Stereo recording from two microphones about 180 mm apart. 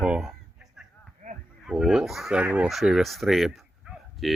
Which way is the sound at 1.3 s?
45° right (ahead or behind).